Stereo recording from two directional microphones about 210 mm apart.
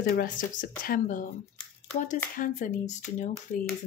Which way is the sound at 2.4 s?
35° left (ahead or behind).